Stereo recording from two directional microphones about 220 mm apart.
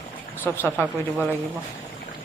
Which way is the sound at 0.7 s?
5° right (ahead or behind).